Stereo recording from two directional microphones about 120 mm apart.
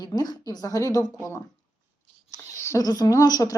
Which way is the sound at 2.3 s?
25° left (ahead or behind).